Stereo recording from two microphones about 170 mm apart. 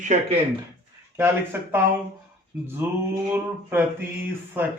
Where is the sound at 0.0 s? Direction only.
45° right (ahead or behind).